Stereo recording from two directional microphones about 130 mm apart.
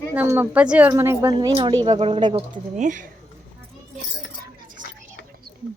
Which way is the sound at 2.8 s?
75° right (ahead or behind).